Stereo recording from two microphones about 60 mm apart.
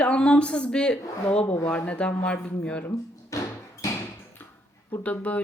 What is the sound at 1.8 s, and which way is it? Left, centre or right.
Speech, left.